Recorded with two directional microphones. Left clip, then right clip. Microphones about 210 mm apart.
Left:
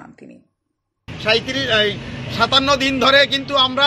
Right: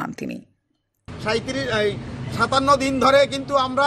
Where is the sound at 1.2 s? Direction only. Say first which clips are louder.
Left 6 dB; 15° right (ahead or behind).